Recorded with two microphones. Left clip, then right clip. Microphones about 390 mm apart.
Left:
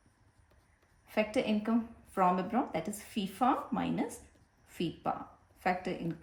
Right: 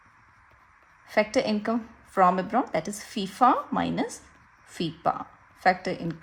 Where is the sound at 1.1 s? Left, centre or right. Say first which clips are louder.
Right 8 dB; centre.